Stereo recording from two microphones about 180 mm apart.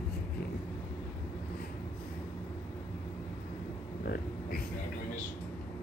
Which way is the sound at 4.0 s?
60° left (ahead or behind).